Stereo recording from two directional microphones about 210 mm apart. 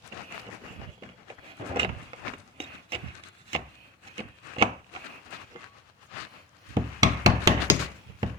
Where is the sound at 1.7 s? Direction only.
25° right (ahead or behind).